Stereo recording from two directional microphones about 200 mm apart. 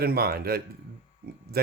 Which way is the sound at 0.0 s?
50° right (ahead or behind).